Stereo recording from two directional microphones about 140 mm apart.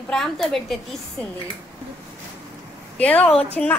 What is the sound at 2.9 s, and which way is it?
Speech, 10° left (ahead or behind).